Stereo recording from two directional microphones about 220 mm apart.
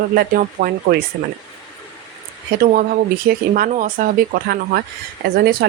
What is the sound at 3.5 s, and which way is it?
Speech, 40° right (ahead or behind).